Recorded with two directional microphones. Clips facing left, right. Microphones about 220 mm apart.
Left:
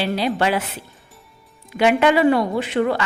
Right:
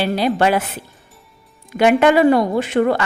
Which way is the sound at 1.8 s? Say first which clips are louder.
Right 3 dB; 45° right (ahead or behind).